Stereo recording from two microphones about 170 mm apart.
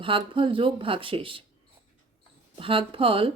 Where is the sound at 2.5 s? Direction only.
30° right (ahead or behind).